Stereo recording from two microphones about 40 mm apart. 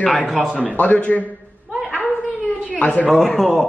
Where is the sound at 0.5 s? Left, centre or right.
Left.